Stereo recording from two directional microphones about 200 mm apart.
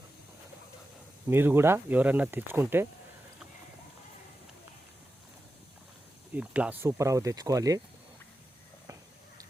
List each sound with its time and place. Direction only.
1.3 s speech: 10° right (ahead or behind)
6.3 s speech: 5° right (ahead or behind)